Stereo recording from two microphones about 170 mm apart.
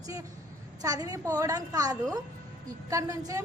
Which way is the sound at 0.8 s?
20° right (ahead or behind).